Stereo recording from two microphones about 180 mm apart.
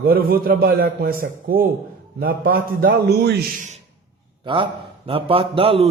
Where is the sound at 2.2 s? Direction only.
55° right (ahead or behind).